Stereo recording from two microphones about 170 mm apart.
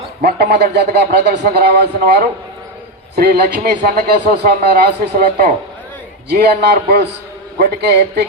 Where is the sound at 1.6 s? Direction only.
75° right (ahead or behind); by 5.6 s 55° right (ahead or behind).